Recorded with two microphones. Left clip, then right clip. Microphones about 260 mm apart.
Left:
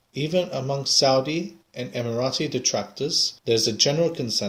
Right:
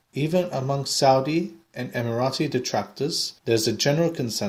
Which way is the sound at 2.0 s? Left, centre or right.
Right.